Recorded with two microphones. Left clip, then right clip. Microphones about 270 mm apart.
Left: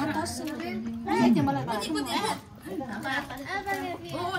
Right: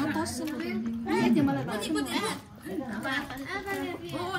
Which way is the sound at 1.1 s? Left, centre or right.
Centre.